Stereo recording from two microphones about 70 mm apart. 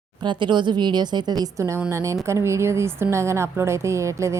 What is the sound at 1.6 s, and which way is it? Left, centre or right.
A woman's voice, right.